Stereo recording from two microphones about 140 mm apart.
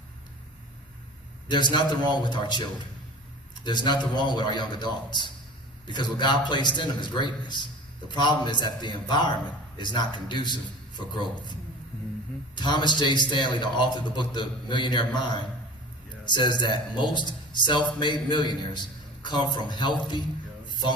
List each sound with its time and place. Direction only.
1.5 s a man's voice: 35° left (ahead or behind)
3.6 s a man's voice: 30° left (ahead or behind)
12.5 s a man's voice: 30° left (ahead or behind)